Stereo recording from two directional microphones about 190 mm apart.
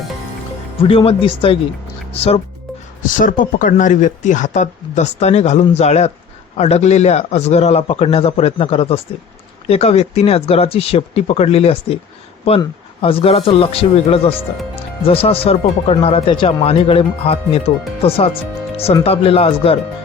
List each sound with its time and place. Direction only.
0.8 s speech: 30° left (ahead or behind)
3.2 s speech: 45° left (ahead or behind)
19.0 s speech: 30° left (ahead or behind)